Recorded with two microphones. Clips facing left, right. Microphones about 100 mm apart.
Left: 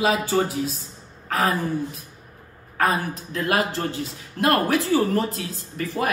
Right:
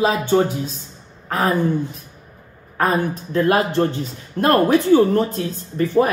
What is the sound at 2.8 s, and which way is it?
A woman's voice, 35° right (ahead or behind).